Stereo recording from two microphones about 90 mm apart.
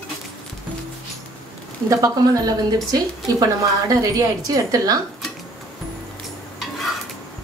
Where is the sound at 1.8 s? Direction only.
40° right (ahead or behind).